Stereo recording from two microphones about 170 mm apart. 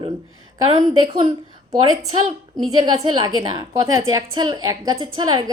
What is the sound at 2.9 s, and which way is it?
A woman's voice, 25° right (ahead or behind).